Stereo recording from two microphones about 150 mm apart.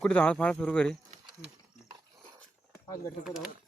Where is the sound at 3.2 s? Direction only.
Centre (ahead or behind).